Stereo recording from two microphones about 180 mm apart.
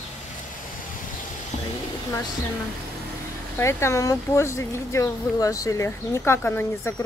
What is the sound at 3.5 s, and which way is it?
Speech, 15° left (ahead or behind).